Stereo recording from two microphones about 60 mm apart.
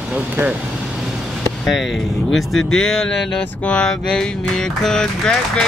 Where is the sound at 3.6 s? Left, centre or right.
Centre.